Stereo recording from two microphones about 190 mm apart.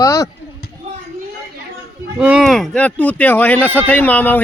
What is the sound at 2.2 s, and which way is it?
A man's voice, 5° right (ahead or behind).